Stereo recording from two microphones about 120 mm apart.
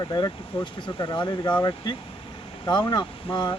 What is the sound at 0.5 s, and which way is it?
Speech, 50° left (ahead or behind).